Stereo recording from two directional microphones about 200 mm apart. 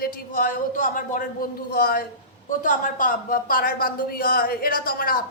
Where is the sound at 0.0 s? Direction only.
45° left (ahead or behind).